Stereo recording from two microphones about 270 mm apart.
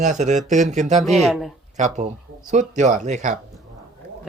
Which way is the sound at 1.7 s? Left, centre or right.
Right.